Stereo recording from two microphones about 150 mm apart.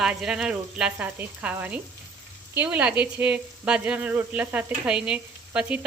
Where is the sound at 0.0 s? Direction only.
5° right (ahead or behind).